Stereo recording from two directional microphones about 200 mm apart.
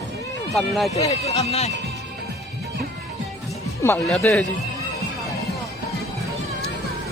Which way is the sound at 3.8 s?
15° left (ahead or behind).